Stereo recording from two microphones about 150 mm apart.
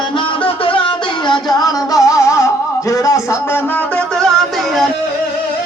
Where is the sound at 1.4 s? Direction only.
25° left (ahead or behind); by 4.9 s centre (ahead or behind).